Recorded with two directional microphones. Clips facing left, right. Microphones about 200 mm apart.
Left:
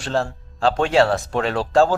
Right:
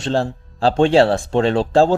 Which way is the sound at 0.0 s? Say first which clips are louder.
Right 3 dB; 30° right (ahead or behind).